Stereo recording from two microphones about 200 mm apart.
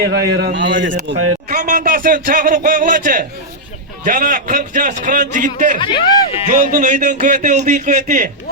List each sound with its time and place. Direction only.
0.0 s a man's voice: 55° right (ahead or behind); by 1.3 s 70° right (ahead or behind)
1.5 s speech: 45° right (ahead or behind)
5.8 s speech: 25° left (ahead or behind)
6.4 s speech: 40° right (ahead or behind)